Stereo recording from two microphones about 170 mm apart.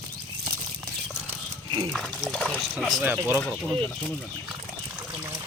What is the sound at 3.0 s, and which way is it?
Speech, 10° right (ahead or behind).